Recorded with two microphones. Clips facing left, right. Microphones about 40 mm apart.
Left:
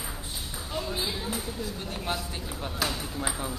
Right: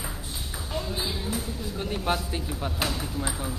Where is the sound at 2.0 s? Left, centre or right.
Right.